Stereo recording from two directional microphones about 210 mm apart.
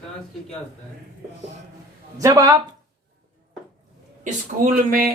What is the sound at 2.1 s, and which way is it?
Speech, 15° right (ahead or behind).